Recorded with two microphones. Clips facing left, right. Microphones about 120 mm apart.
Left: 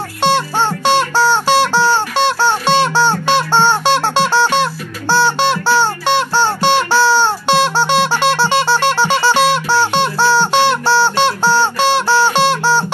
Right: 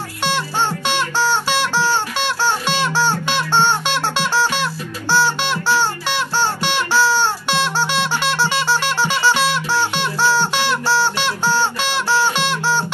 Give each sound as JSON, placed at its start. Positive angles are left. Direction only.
{"t": 0.2, "sound": "music", "side_deg": 30}